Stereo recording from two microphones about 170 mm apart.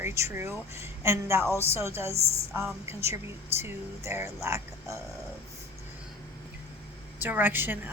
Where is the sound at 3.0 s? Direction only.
15° right (ahead or behind).